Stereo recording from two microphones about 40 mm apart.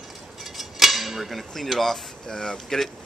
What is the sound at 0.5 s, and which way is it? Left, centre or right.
Speech, centre.